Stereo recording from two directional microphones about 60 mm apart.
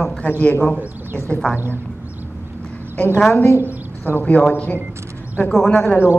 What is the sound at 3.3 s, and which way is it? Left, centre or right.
Speech, left.